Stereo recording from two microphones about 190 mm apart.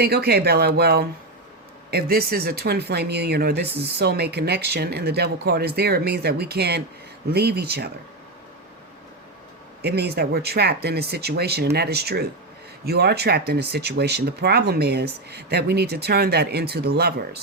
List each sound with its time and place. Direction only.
0.0 s speech: 55° right (ahead or behind)
9.8 s speech: 60° right (ahead or behind)